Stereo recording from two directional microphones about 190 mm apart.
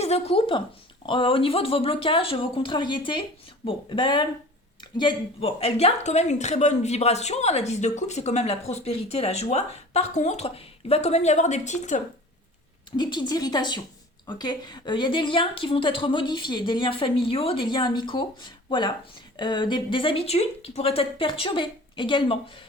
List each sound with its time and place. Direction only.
0.0 s a woman's voice: 30° left (ahead or behind)
13.0 s a woman's voice: 20° left (ahead or behind)